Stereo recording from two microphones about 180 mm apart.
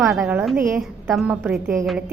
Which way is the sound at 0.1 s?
5° right (ahead or behind).